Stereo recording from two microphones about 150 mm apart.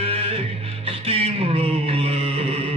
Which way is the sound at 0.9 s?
40° right (ahead or behind).